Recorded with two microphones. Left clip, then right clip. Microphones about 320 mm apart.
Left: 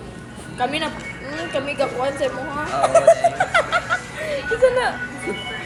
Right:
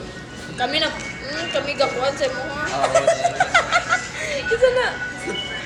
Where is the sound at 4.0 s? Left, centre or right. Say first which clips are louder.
Right 1 dB; left.